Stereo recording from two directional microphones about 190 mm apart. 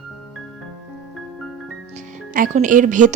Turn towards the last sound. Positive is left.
turn(degrees=-40)  # may be behind; listen again after turning